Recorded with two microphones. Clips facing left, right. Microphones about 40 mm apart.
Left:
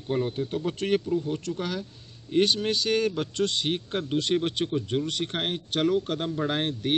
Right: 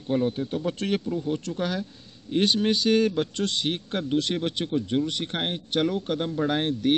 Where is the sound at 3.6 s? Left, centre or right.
Centre.